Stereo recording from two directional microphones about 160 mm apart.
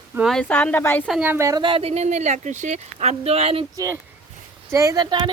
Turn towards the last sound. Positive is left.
turn(degrees=-25)  # may be behind; listen again after turning